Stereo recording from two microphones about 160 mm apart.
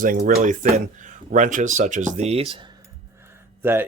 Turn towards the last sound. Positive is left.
turn(degrees=-15)  # may be behind; listen again after turning